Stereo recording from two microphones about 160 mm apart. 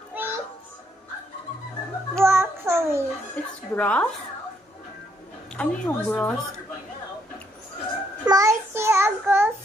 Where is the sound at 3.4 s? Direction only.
10° left (ahead or behind).